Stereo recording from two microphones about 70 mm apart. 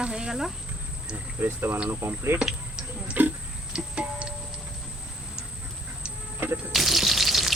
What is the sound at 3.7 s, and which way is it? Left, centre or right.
Music, centre.